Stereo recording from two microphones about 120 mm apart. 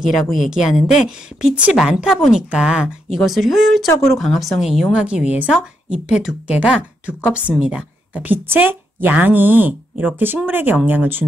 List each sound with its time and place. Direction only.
0.0 s a woman's voice: centre (ahead or behind)